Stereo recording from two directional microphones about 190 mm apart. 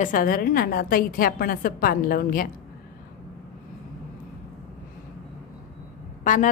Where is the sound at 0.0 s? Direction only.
45° left (ahead or behind).